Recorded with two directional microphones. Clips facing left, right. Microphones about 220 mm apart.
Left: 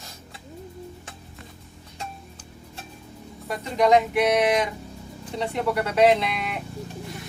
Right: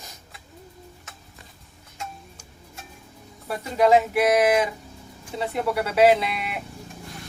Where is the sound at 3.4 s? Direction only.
5° right (ahead or behind).